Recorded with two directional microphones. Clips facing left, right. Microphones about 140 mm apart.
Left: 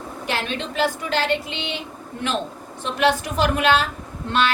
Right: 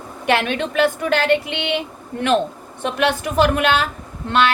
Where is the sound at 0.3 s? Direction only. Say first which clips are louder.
Right 8 dB; 65° right (ahead or behind).